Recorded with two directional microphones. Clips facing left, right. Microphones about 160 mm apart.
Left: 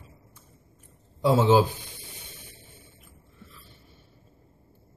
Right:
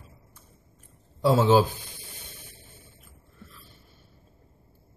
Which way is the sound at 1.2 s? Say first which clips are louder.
Even; 15° left (ahead or behind).